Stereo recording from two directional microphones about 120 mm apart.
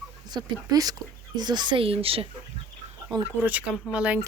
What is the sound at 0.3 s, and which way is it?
Speech, 30° right (ahead or behind).